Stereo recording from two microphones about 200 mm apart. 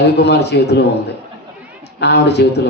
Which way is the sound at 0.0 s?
55° left (ahead or behind).